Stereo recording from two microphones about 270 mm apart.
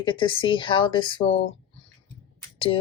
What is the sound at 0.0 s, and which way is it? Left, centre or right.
Speech, centre.